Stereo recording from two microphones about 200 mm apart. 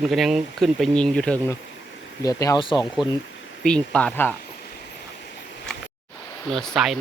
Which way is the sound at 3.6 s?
5° left (ahead or behind).